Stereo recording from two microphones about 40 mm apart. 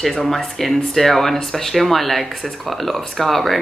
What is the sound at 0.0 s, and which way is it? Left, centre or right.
A woman's voice, centre.